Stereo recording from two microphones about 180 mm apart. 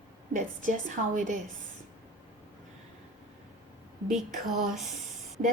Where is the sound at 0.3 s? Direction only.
45° right (ahead or behind).